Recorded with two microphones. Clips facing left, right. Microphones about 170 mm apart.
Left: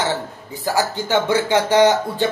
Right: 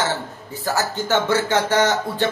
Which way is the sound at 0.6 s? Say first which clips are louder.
Left 2 dB; 15° left (ahead or behind).